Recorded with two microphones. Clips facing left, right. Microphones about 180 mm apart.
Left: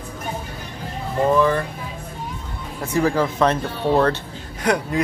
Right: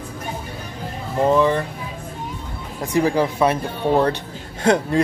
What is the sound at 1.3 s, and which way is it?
Speech, 20° right (ahead or behind).